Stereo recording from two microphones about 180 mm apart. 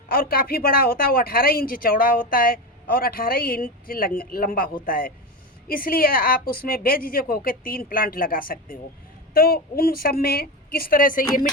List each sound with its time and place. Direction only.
0.1 s a woman's voice: 55° left (ahead or behind)